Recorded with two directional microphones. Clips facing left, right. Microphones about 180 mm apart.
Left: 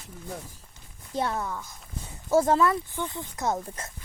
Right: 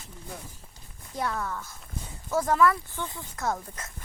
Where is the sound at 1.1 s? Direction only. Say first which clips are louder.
Left 2 dB; 25° left (ahead or behind).